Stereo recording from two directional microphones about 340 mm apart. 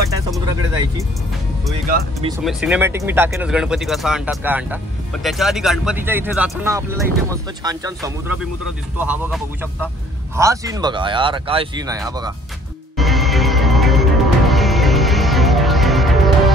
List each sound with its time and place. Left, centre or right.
1.7 s speech: right
2.4 s speech: centre
12.9 s music: centre